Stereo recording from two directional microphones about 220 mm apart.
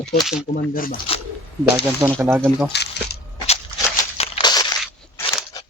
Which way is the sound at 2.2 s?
10° right (ahead or behind).